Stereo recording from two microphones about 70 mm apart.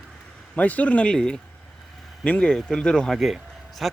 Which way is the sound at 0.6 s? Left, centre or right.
Left.